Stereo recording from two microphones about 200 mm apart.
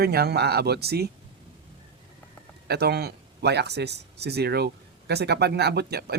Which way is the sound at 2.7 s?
55° right (ahead or behind).